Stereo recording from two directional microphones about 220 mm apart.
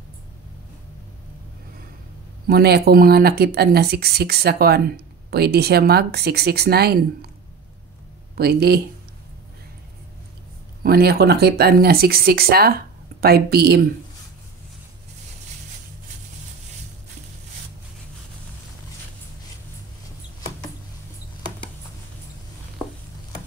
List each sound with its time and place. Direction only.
2.4 s speech: 45° right (ahead or behind)
8.4 s speech: 45° right (ahead or behind)
10.8 s speech: 45° right (ahead or behind)